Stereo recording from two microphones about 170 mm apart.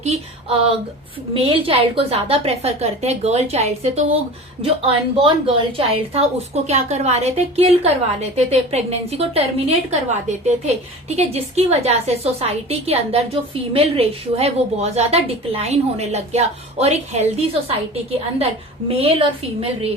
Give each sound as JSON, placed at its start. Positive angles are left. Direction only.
{"t": 0.0, "sound": "a woman's voice", "side_deg": -40}